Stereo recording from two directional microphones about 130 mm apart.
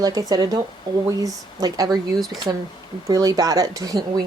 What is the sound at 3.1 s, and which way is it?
Speech, 30° right (ahead or behind).